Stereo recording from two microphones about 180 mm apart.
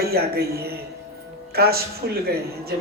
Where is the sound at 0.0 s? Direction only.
60° right (ahead or behind).